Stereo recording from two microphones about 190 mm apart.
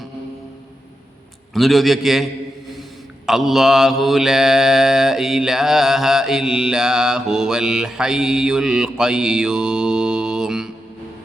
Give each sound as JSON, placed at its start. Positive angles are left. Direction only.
{"t": 1.5, "sound": "mantra", "side_deg": 0}
{"t": 3.2, "sound": "mantra", "side_deg": 0}